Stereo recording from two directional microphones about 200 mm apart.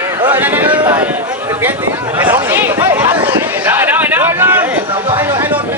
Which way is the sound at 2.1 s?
10° right (ahead or behind).